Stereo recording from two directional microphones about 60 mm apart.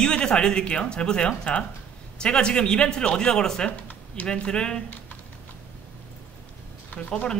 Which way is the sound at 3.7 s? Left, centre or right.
Left.